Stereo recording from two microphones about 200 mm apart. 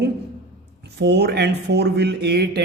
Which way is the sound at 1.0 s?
55° right (ahead or behind).